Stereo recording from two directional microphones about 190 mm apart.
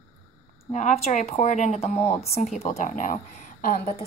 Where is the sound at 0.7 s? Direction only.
40° left (ahead or behind).